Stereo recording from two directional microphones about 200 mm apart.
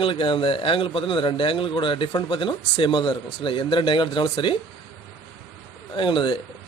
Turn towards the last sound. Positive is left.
turn(degrees=25)  # may be behind; listen again after turning